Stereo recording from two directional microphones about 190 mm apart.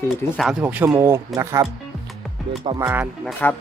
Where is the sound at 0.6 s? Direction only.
10° right (ahead or behind).